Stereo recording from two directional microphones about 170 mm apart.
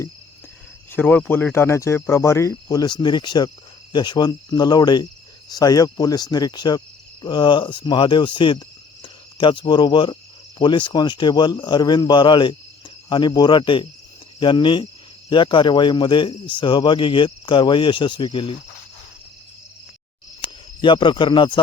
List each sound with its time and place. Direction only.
0.9 s speech: 10° left (ahead or behind); by 5.0 s 25° left (ahead or behind)
5.5 s cricket: 20° left (ahead or behind)
10.6 s speech: 25° left (ahead or behind)
20.8 s speech: 30° left (ahead or behind)